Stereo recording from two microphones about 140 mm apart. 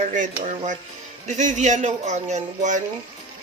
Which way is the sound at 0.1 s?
60° right (ahead or behind).